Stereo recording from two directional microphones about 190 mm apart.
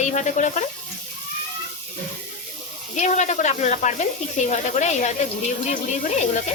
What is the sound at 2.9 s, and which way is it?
Speech, 40° left (ahead or behind).